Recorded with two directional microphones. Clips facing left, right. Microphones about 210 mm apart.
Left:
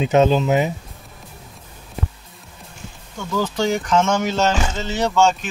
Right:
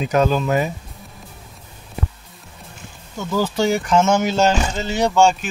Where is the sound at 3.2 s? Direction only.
10° right (ahead or behind).